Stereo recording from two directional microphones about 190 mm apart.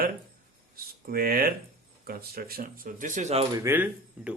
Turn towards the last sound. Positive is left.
turn(degrees=-10)  # may be behind; listen again after turning